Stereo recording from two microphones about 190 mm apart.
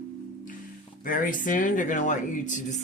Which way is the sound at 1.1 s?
45° left (ahead or behind).